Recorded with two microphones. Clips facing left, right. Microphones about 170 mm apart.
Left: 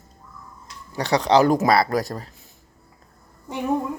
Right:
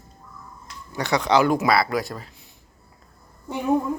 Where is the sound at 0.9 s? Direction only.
35° left (ahead or behind).